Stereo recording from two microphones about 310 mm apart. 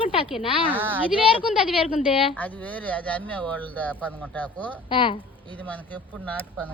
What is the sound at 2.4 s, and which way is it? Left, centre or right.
Speech, centre.